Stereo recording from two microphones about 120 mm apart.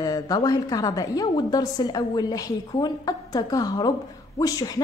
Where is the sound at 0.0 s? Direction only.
30° left (ahead or behind).